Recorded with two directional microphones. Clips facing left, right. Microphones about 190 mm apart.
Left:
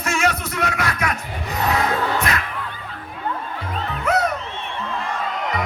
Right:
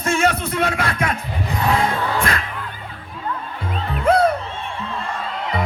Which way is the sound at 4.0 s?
30° right (ahead or behind).